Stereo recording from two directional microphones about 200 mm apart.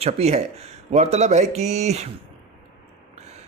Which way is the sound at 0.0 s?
30° right (ahead or behind).